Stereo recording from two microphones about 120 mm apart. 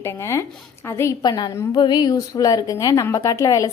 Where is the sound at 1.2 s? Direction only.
35° left (ahead or behind).